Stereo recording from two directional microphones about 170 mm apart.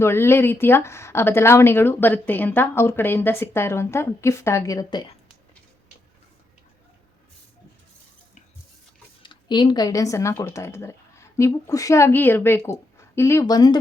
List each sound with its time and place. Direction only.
0.0 s speech: 15° left (ahead or behind)
9.2 s speech: 25° left (ahead or behind)